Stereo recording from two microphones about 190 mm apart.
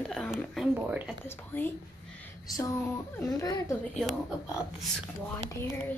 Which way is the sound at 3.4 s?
20° left (ahead or behind).